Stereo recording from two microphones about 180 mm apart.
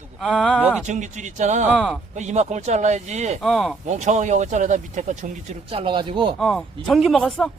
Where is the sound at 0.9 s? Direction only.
40° right (ahead or behind).